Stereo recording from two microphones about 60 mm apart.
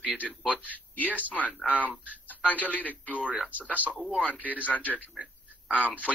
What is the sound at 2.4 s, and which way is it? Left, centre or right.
Speech, left.